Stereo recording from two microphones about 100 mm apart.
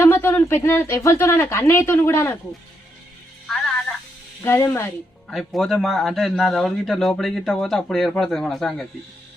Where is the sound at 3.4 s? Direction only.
5° left (ahead or behind).